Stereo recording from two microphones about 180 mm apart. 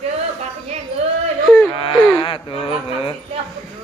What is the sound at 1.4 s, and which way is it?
Whimper, 5° left (ahead or behind).